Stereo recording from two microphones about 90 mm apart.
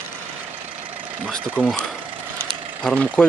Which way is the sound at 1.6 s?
20° left (ahead or behind).